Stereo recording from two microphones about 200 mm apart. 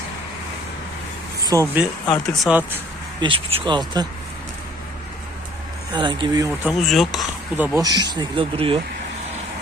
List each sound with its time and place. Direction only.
1.4 s speech: 15° right (ahead or behind)
3.2 s speech: 25° right (ahead or behind)
5.9 s speech: 25° right (ahead or behind)
6.7 s speech: centre (ahead or behind)
7.8 s speech: 20° right (ahead or behind)